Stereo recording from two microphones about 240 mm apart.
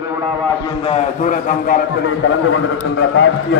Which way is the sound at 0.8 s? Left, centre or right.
Left.